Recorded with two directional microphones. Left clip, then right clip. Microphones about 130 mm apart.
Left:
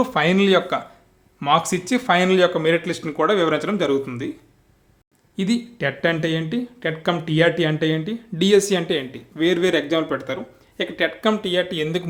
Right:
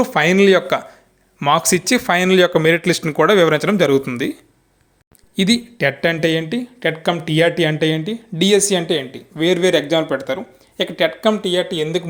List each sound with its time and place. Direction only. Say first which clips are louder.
0.0 s speech: right 5 dB; 20° right (ahead or behind)
1.5 s speech: right 4 dB; 40° right (ahead or behind)
5.7 s speech: right 4 dB; 25° right (ahead or behind); by 12.0 s centre (ahead or behind)